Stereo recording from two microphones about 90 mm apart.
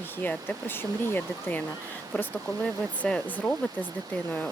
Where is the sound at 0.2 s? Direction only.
20° left (ahead or behind).